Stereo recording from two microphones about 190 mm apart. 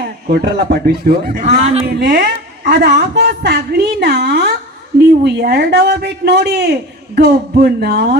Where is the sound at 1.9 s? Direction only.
55° right (ahead or behind).